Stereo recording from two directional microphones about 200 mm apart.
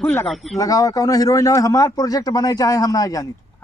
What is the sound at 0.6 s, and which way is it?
Speech, 15° left (ahead or behind).